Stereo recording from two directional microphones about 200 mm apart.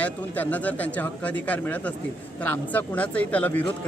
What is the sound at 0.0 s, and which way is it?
Speech, 10° left (ahead or behind).